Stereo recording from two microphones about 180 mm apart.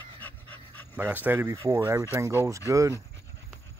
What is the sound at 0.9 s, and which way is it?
Speech, 10° right (ahead or behind).